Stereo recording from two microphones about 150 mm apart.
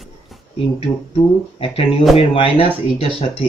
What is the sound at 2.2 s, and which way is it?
Speech, 40° left (ahead or behind).